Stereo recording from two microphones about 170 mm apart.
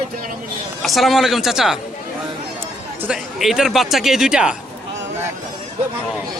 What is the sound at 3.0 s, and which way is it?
Speech, 5° right (ahead or behind).